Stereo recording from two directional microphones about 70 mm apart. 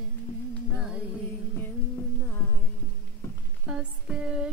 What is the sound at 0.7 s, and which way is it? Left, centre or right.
Music, centre.